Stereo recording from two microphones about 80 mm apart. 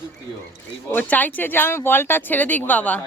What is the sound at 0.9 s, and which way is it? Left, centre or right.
Speech, left.